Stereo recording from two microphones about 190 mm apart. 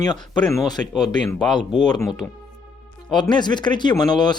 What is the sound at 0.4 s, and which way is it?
Speech, centre (ahead or behind).